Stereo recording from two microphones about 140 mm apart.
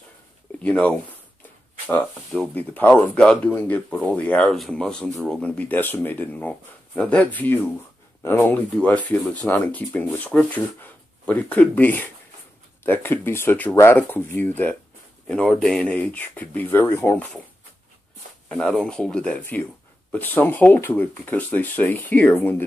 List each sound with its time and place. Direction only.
0.6 s speech: 10° left (ahead or behind)
18.5 s speech: 5° left (ahead or behind)